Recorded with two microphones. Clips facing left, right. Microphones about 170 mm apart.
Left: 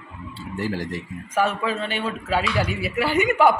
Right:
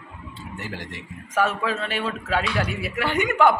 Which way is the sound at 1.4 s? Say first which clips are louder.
Left 1 dB; centre (ahead or behind).